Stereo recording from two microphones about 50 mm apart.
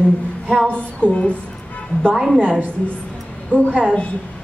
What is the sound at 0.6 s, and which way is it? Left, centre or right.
Speech, left.